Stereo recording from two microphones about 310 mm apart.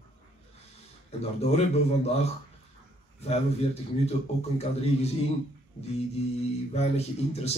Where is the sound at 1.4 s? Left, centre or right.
Centre.